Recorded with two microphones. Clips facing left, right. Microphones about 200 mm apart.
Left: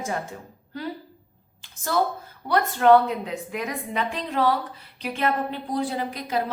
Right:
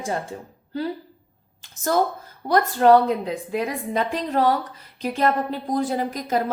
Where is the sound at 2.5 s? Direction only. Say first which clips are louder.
Right 2 dB; 40° right (ahead or behind).